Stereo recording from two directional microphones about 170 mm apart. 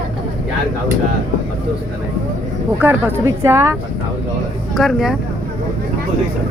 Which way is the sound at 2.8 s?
10° right (ahead or behind).